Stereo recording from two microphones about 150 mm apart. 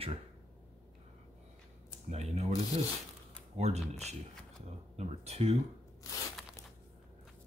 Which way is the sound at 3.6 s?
45° right (ahead or behind).